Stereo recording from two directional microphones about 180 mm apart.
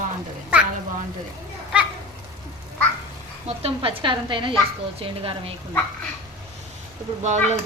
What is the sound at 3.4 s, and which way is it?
A woman's voice, 30° right (ahead or behind).